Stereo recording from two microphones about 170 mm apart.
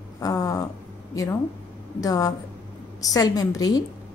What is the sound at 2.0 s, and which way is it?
A woman's voice, 20° left (ahead or behind).